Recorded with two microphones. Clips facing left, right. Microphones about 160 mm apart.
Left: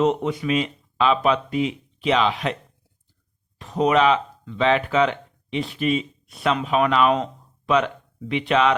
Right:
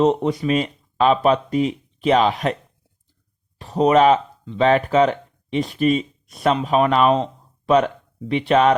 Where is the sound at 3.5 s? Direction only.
35° right (ahead or behind).